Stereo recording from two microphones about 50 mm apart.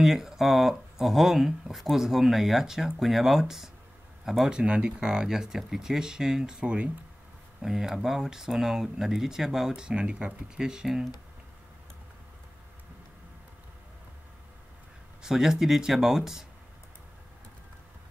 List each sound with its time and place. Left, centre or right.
0.0 s speech: centre
4.5 s speech: right
7.6 s speech: centre
15.2 s speech: centre